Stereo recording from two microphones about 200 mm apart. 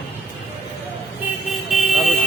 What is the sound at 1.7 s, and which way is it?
Vehicle, centre (ahead or behind).